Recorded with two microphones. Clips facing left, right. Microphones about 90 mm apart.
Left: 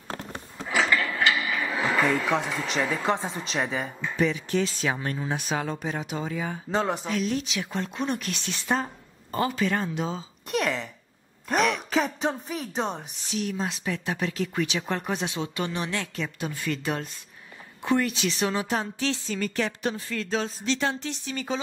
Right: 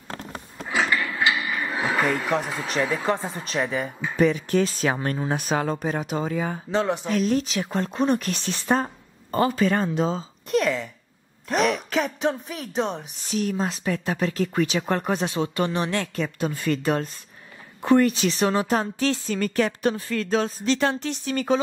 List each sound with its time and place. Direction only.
1.0 s a sound: 15° right (ahead or behind)
1.4 s a sound: centre (ahead or behind)
2.8 s speech: centre (ahead or behind)
4.2 s speech: 45° right (ahead or behind)
6.7 s speech: centre (ahead or behind)
7.1 s speech: 45° right (ahead or behind)
10.5 s speech: centre (ahead or behind)
11.9 s speech: centre (ahead or behind)
13.3 s speech: 45° right (ahead or behind)